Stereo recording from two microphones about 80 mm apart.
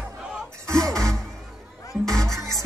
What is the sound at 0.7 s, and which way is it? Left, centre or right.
Music, centre.